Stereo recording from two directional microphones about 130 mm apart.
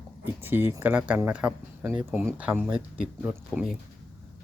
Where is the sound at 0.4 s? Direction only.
15° right (ahead or behind).